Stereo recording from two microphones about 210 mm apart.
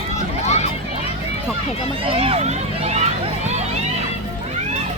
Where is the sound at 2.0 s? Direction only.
25° right (ahead or behind).